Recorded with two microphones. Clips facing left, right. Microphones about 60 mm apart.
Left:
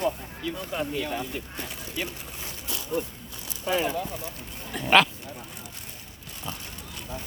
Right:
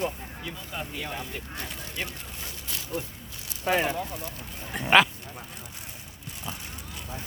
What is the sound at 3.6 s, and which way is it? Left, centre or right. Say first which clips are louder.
Speech: right 1 dB; right.